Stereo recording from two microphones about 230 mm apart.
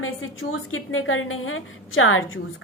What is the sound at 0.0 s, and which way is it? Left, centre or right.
A woman's voice, left.